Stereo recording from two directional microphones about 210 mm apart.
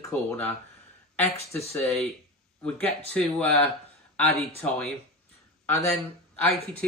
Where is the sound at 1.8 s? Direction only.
5° left (ahead or behind).